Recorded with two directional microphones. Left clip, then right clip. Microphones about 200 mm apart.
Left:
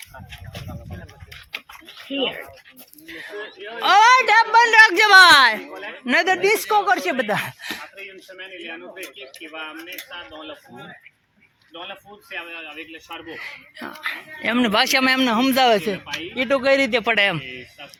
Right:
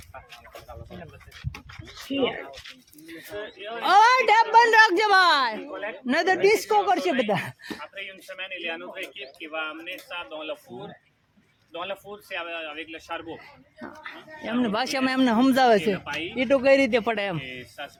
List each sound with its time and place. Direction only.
2.1 s speech: 80° right
3.8 s a woman's voice: 10° right (ahead or behind)
4.0 s a sound: 25° right (ahead or behind)
4.9 s a woman's voice: 5° right (ahead or behind)
6.1 s speech: 5° right (ahead or behind)
7.3 s a sound: centre (ahead or behind)
8.4 s speech: 20° right (ahead or behind)
11.7 s speech: 25° right (ahead or behind)
13.3 s speech: 10° left (ahead or behind)
15.2 s speech: 10° right (ahead or behind)
17.1 s a woman's voice: 5° left (ahead or behind)